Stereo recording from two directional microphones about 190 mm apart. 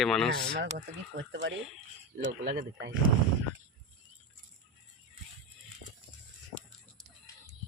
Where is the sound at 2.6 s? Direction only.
65° right (ahead or behind).